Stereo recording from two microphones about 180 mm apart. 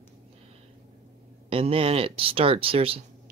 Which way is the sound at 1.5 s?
30° right (ahead or behind).